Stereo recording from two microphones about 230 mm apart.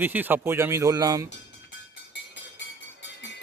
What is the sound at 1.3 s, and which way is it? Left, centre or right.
Music, left.